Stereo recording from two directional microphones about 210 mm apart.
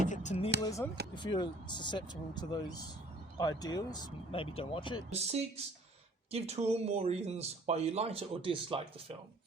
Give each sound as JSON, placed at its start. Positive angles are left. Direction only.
{"t": 0.1, "sound": "speech", "side_deg": 35}
{"t": 0.6, "sound": "speech", "side_deg": 15}
{"t": 5.1, "sound": "speech", "side_deg": -30}